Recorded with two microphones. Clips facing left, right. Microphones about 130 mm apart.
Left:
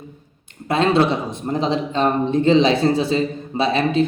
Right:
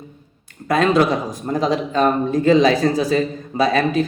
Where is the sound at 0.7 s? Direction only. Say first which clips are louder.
Right 1 dB; 30° left (ahead or behind).